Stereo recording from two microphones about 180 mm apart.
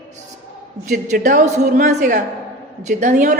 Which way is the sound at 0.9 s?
45° right (ahead or behind).